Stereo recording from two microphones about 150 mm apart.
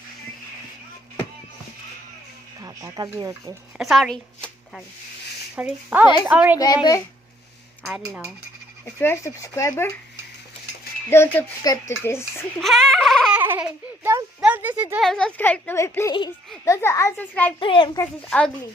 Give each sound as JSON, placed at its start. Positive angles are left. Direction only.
{"t": 2.6, "sound": "speech", "side_deg": -25}
{"t": 3.8, "sound": "speech", "side_deg": 0}
{"t": 5.5, "sound": "speech", "side_deg": -10}
{"t": 7.9, "sound": "speech", "side_deg": -10}
{"t": 9.0, "sound": "speech", "side_deg": 15}
{"t": 11.1, "sound": "a child's voice", "side_deg": 15}
{"t": 12.5, "sound": "baby cry", "side_deg": 0}
{"t": 13.3, "sound": "a sound", "side_deg": -10}
{"t": 15.0, "sound": "a child's voice", "side_deg": 5}
{"t": 17.6, "sound": "a child's voice", "side_deg": 35}
{"t": 18.0, "sound": "a child's voice", "side_deg": 5}